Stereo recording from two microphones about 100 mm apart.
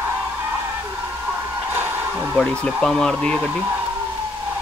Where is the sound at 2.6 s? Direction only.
5° left (ahead or behind).